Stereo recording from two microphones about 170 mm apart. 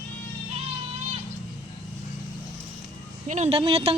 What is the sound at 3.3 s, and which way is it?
Speech, 35° right (ahead or behind).